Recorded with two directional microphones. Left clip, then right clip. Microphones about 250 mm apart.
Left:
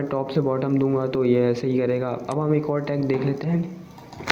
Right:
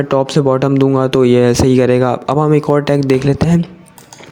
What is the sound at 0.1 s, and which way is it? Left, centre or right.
Speech, right.